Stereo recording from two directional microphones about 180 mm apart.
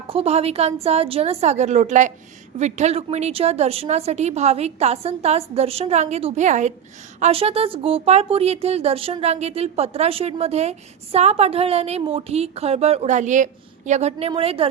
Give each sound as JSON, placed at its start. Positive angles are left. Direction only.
{"t": 0.1, "sound": "speech", "side_deg": -35}